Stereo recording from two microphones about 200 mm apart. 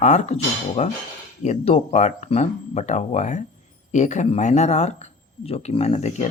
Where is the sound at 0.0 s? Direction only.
35° left (ahead or behind).